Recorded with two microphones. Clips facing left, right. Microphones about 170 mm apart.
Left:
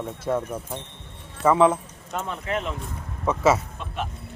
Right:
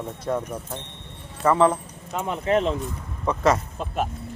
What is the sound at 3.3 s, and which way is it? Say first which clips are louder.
Speech: left 1 dB; 5° left (ahead or behind).